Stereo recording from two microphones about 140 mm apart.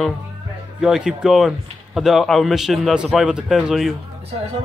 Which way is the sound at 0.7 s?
5° right (ahead or behind).